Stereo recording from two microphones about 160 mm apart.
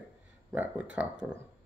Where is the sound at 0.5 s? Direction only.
10° right (ahead or behind).